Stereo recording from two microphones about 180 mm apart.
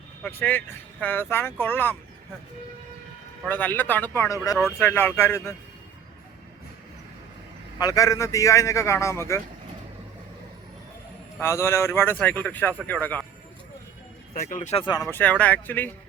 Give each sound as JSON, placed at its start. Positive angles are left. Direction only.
{"t": 0.2, "sound": "speech", "side_deg": 10}
{"t": 3.4, "sound": "speech", "side_deg": 10}
{"t": 7.8, "sound": "speech", "side_deg": 20}
{"t": 11.3, "sound": "speech", "side_deg": 15}
{"t": 14.3, "sound": "speech", "side_deg": 50}
{"t": 15.1, "sound": "speech", "side_deg": 10}